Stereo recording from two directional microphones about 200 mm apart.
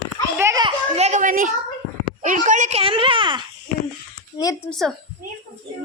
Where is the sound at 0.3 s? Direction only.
15° right (ahead or behind).